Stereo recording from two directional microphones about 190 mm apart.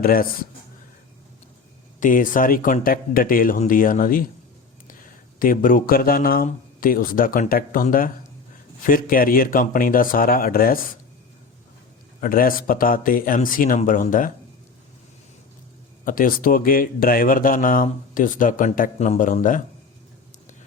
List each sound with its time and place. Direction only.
0.0 s a man's voice: 50° left (ahead or behind)
2.0 s a man's voice: 45° left (ahead or behind)
5.4 s a man's voice: 45° left (ahead or behind)
12.2 s a man's voice: 50° left (ahead or behind)
16.0 s a man's voice: 45° left (ahead or behind)